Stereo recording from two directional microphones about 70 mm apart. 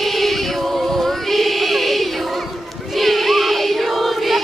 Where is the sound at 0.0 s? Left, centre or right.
Centre.